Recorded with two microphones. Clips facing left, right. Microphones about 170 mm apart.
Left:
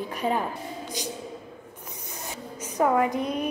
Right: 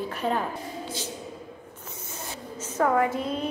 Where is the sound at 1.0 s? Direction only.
15° left (ahead or behind).